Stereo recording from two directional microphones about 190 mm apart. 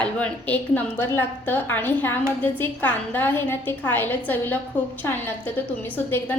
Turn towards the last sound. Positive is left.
turn(degrees=10)  # may be behind; listen again after turning